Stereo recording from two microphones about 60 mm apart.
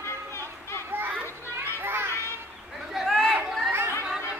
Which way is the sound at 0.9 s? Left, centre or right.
Right.